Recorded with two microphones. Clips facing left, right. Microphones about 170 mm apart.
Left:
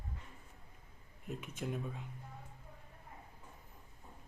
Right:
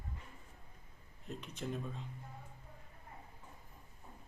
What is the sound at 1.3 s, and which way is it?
Speech, 5° left (ahead or behind).